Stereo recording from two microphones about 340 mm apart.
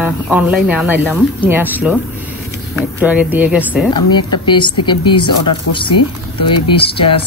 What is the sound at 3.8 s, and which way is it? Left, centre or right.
Speech, centre.